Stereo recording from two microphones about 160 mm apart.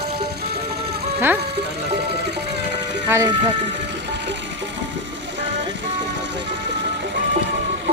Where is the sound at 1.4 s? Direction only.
90° right.